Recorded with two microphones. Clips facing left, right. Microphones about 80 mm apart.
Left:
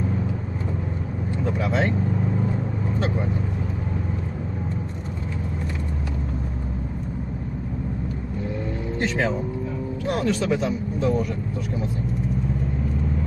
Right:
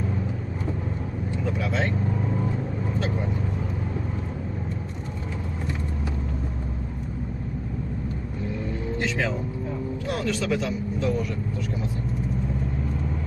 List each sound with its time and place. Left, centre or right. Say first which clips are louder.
10.0 s speech: left 4 dB; left